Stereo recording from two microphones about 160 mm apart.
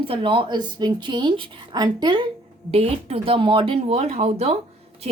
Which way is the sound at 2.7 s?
40° right (ahead or behind).